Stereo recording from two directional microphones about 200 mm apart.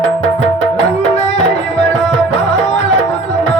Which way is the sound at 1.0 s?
35° left (ahead or behind).